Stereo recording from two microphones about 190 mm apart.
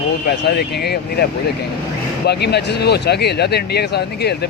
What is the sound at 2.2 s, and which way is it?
Speech, 60° left (ahead or behind).